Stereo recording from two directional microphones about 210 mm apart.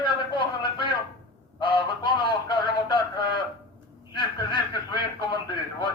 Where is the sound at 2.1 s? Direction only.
20° left (ahead or behind).